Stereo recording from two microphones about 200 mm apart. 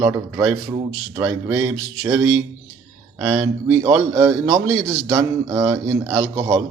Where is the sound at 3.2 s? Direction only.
15° right (ahead or behind).